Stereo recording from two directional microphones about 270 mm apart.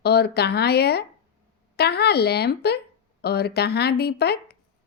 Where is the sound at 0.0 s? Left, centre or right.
Left.